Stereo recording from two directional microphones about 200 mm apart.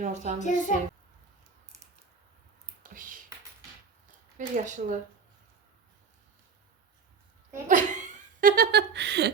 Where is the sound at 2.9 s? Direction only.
40° right (ahead or behind).